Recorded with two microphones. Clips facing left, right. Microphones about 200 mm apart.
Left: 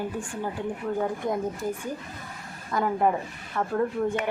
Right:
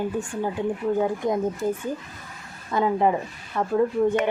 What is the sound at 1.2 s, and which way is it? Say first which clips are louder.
Speech: right 3 dB; 20° right (ahead or behind).